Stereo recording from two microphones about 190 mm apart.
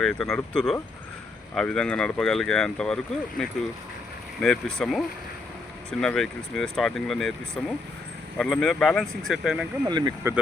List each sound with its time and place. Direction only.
0.0 s speech: 5° left (ahead or behind)
9.8 s speech: 20° right (ahead or behind)